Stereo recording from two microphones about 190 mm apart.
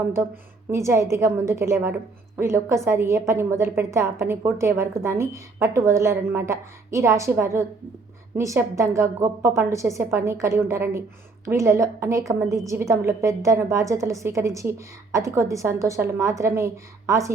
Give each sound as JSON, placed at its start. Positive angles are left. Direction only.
{"t": 0.7, "sound": "a woman's voice", "side_deg": -15}